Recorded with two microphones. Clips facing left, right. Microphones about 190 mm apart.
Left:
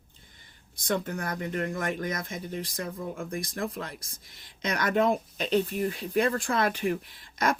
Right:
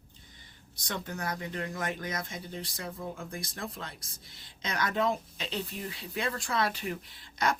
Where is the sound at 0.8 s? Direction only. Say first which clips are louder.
Left 6 dB; 50° left (ahead or behind).